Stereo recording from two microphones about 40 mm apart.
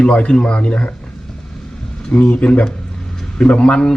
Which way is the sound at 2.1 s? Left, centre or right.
Left.